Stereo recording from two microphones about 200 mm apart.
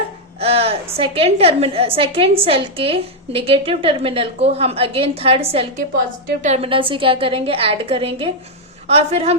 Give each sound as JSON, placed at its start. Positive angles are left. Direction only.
{"t": 0.3, "sound": "a woman's voice", "side_deg": -30}